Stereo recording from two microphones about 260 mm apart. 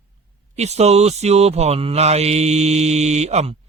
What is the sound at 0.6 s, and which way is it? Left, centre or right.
Mantra, right.